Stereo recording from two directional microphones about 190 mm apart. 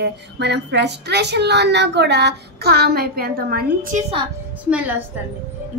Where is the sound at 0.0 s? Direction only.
65° right (ahead or behind); by 4.0 s 50° right (ahead or behind).